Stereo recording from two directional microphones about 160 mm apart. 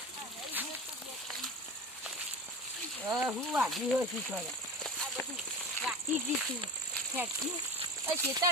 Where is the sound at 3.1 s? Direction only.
10° right (ahead or behind).